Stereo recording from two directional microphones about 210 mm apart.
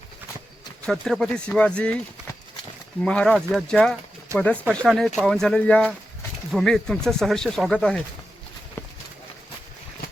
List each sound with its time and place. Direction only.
0.9 s speech: centre (ahead or behind)
3.0 s speech: 5° left (ahead or behind)
8.8 s clip-clop: 10° left (ahead or behind)